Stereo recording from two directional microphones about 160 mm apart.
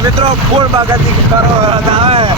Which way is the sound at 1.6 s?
40° right (ahead or behind).